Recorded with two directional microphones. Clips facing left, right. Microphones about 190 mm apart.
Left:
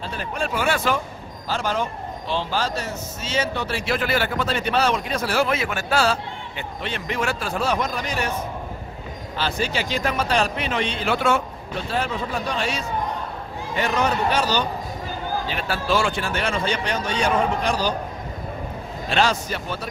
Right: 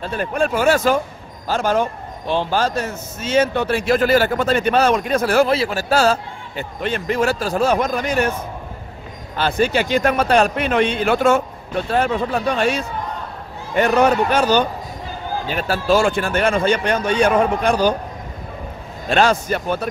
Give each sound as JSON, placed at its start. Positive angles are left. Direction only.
{"t": 0.0, "sound": "a man's voice", "side_deg": -55}
{"t": 5.5, "sound": "a man's voice", "side_deg": -35}
{"t": 9.4, "sound": "a man's voice", "side_deg": -55}
{"t": 19.0, "sound": "a man's voice", "side_deg": -50}